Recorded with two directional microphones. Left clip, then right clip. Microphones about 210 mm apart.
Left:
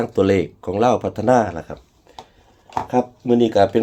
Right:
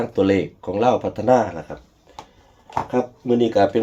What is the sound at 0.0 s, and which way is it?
Speech, 40° left (ahead or behind).